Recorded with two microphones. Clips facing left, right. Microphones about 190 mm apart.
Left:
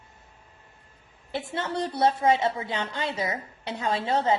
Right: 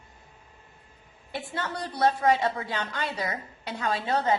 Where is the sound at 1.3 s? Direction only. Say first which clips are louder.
Left 4 dB; 25° left (ahead or behind).